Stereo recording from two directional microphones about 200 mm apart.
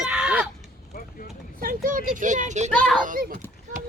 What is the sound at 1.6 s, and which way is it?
Speech, 45° right (ahead or behind).